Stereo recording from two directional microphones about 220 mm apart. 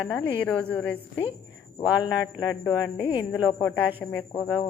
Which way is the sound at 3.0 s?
20° left (ahead or behind).